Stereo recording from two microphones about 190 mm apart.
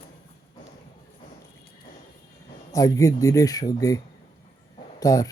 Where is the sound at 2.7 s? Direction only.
15° left (ahead or behind).